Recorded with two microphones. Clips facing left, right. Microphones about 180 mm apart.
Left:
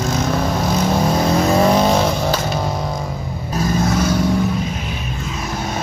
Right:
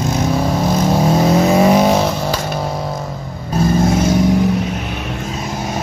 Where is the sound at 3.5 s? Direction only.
30° right (ahead or behind).